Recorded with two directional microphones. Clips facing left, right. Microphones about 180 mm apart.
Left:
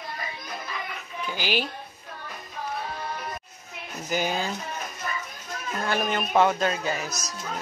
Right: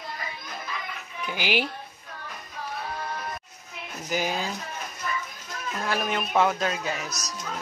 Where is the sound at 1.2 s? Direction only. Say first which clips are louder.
Right 1 dB; 15° right (ahead or behind).